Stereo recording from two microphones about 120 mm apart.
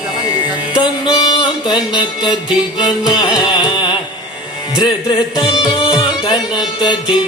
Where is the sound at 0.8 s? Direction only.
35° left (ahead or behind).